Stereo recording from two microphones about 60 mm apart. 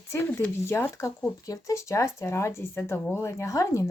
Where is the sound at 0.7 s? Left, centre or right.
Left.